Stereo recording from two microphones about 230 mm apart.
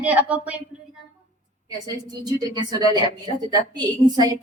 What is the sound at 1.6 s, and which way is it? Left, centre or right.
A woman's voice, centre.